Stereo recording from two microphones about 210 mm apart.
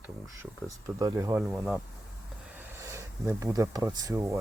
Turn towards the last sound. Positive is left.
turn(degrees=-15)  # may be behind; listen again after turning